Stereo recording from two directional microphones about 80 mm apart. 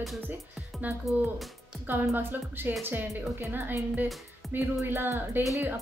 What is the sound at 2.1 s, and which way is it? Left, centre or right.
A woman's voice, right.